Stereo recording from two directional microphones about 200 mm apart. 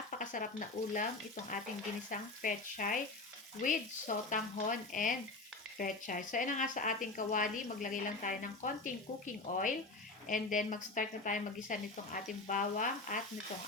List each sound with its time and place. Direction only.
0.2 s frying: 40° left (ahead or behind)
2.0 s speech: 40° left (ahead or behind)